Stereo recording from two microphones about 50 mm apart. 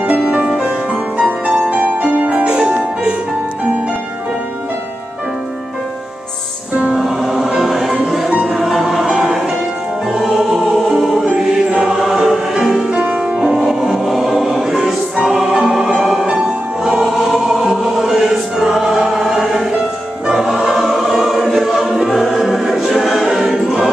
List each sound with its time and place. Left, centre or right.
0.0 s music: right
6.7 s music: right
7.0 s music: centre
12.6 s music: centre
13.4 s music: centre
17.0 s choir: centre